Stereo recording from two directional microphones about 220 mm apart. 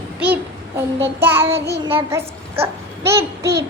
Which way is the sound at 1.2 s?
10° right (ahead or behind).